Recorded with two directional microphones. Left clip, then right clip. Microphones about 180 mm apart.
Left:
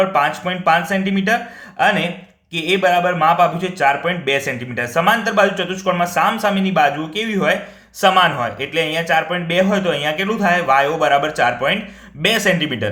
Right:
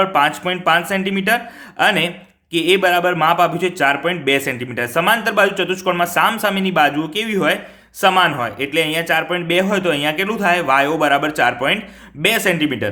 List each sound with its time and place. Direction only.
0.0 s a man's voice: 30° right (ahead or behind)